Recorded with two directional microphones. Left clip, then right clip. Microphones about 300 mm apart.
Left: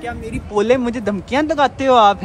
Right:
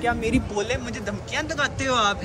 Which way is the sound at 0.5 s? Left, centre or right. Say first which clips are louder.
Left 11 dB; centre.